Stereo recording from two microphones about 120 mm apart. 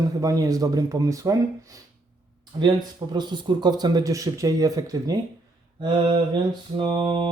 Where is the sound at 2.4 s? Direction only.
40° right (ahead or behind).